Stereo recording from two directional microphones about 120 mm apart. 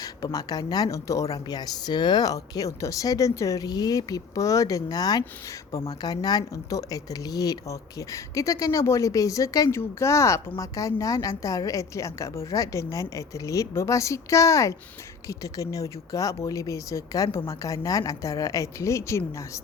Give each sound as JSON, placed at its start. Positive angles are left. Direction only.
{"t": 0.0, "sound": "speech", "side_deg": 30}